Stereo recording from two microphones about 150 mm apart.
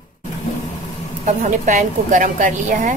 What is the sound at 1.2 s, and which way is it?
A woman's voice, 55° right (ahead or behind).